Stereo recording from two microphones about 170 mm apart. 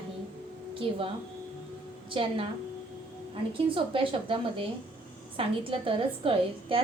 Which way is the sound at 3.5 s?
30° right (ahead or behind).